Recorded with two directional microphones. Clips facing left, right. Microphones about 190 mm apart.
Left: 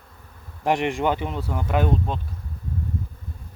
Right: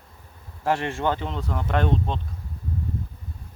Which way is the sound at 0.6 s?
15° left (ahead or behind).